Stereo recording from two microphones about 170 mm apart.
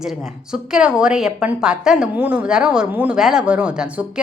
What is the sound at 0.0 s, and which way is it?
A woman's voice, 5° right (ahead or behind).